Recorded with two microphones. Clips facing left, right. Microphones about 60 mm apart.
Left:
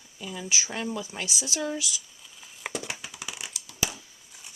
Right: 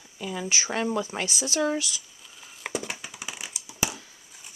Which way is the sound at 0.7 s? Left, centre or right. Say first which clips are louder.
Right 5 dB; right.